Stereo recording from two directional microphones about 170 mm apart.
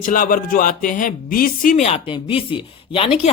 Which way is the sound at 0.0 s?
55° left (ahead or behind).